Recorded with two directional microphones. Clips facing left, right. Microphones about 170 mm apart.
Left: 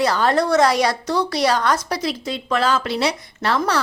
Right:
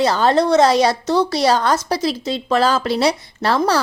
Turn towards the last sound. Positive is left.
turn(degrees=-35)  # may be behind; listen again after turning